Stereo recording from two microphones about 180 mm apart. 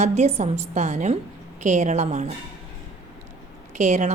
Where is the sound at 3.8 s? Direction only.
40° right (ahead or behind).